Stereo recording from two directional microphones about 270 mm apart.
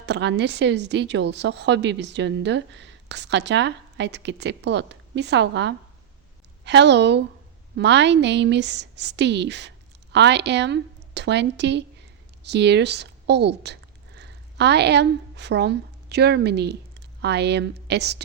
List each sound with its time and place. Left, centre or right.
0.0 s a woman's voice: right